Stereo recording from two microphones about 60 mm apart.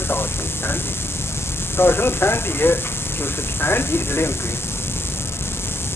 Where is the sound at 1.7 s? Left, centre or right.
Left.